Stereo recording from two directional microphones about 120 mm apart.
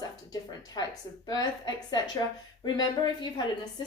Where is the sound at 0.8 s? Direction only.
35° left (ahead or behind).